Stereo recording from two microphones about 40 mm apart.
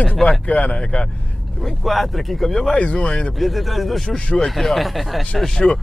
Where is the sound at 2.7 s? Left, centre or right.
Left.